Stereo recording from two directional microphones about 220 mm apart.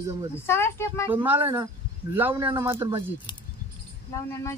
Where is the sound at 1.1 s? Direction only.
10° right (ahead or behind).